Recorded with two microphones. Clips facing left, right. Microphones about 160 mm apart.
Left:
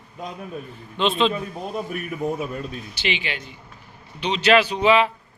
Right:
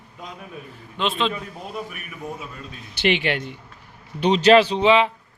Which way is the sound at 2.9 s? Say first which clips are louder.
Right 9 dB; 60° right (ahead or behind).